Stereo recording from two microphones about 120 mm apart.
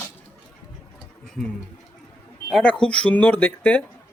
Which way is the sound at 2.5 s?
10° left (ahead or behind).